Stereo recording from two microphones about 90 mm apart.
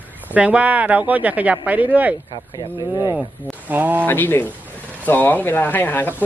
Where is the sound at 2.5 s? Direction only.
50° left (ahead or behind).